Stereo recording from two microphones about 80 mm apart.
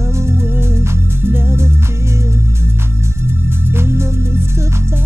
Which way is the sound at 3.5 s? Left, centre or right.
Right.